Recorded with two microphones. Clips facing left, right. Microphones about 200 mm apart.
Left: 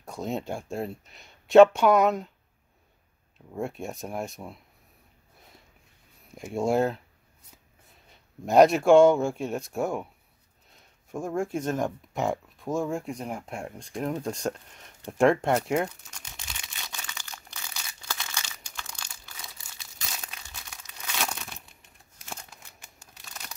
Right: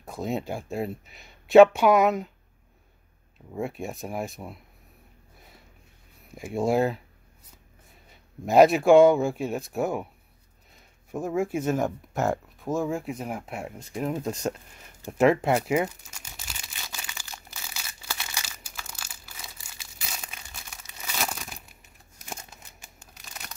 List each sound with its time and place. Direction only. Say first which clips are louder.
0.0 s speech: right 2 dB; 5° right (ahead or behind)
3.5 s speech: right 1 dB; 5° right (ahead or behind)
6.3 s speech: right 1 dB; 5° right (ahead or behind)
8.5 s speech: right 1 dB; 5° right (ahead or behind)
11.1 s a sound: right 2 dB; 5° right (ahead or behind)
22.3 s crumpling: right 2 dB; 20° right (ahead or behind)
23.2 s crumpling: right 1 dB; centre (ahead or behind)